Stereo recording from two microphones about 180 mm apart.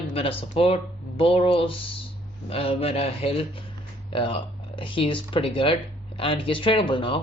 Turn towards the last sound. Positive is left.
turn(degrees=30)  # may be behind; listen again after turning